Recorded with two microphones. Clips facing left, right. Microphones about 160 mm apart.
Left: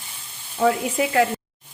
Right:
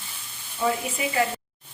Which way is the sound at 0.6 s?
65° left (ahead or behind).